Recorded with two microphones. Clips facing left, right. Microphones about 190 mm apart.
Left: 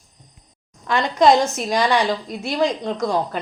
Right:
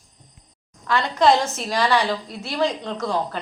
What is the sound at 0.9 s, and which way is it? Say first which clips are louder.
A woman's voice: left 3 dB; 15° left (ahead or behind).